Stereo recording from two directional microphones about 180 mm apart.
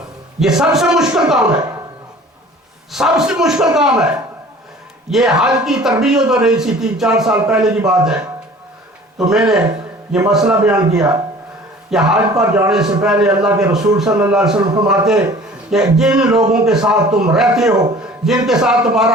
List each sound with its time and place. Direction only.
0.3 s speech: 5° right (ahead or behind)
1.5 s speech: 15° right (ahead or behind)
2.9 s speech: 5° right (ahead or behind)